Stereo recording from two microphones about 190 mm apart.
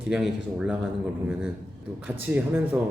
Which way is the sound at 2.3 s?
10° right (ahead or behind).